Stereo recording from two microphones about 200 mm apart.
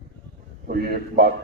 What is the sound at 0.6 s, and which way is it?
Speech, 45° right (ahead or behind).